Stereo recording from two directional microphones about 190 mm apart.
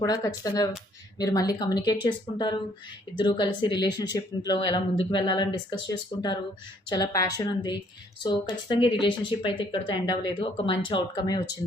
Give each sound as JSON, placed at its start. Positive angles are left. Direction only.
{"t": 0.0, "sound": "speech", "side_deg": 20}